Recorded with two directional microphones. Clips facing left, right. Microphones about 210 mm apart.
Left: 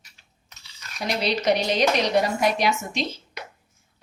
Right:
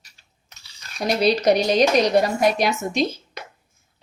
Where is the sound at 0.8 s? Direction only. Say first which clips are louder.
Right 6 dB; 35° right (ahead or behind).